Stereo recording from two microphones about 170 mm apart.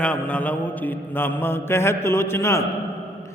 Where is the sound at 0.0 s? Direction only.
5° left (ahead or behind).